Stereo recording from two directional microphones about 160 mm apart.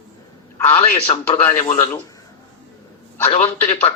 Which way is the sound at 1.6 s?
50° left (ahead or behind).